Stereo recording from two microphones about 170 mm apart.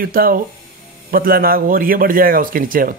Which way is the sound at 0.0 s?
60° right (ahead or behind).